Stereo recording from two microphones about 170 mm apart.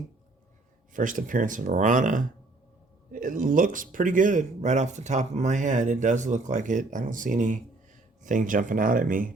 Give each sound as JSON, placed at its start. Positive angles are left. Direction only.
{"t": 0.9, "sound": "speech", "side_deg": -50}